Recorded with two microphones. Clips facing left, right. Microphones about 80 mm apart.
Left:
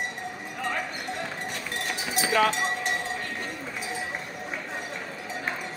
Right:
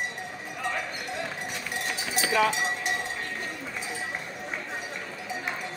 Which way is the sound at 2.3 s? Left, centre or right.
Left.